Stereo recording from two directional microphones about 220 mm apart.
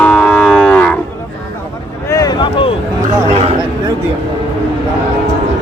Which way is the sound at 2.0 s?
15° left (ahead or behind).